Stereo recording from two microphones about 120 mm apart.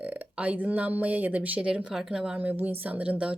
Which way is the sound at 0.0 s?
10° right (ahead or behind).